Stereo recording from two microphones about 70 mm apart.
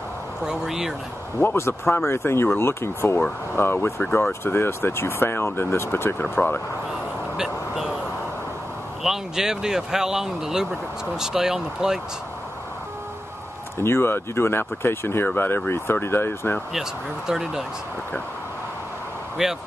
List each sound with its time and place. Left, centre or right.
0.5 s speech: centre
1.4 s speech: left
7.3 s speech: centre
9.0 s speech: centre
13.8 s speech: left
17.3 s speech: centre
19.4 s speech: centre